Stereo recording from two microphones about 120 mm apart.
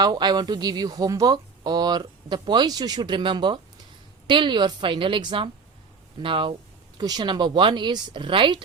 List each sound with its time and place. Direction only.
0.0 s speech: 35° right (ahead or behind)
7.0 s speech: 35° right (ahead or behind)